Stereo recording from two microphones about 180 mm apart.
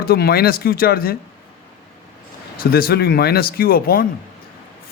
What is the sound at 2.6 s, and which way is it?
A man's voice, 55° left (ahead or behind).